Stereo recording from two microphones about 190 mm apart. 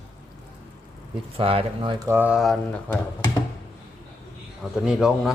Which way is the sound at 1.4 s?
30° right (ahead or behind).